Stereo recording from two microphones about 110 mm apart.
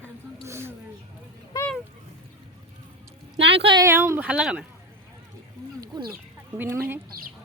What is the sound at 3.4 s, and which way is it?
Speech, 55° right (ahead or behind).